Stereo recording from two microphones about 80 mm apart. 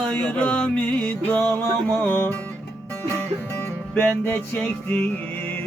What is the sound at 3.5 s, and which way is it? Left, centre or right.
Music, left.